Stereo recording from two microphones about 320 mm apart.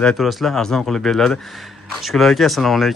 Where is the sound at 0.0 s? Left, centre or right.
Centre.